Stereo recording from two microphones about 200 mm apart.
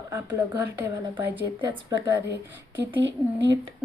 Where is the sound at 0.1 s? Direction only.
15° right (ahead or behind).